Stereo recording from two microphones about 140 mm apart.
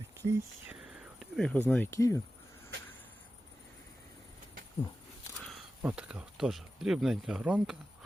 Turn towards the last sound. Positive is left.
turn(degrees=-10)  # may be behind; listen again after turning